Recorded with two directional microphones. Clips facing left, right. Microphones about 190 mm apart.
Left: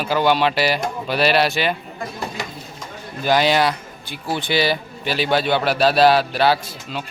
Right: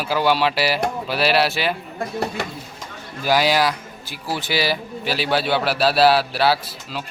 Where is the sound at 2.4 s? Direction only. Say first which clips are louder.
Right 2 dB; 60° right (ahead or behind).